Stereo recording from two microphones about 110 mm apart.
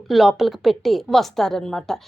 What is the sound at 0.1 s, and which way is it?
A woman's voice, centre (ahead or behind).